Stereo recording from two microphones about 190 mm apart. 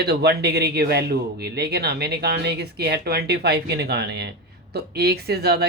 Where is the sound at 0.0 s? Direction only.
60° right (ahead or behind).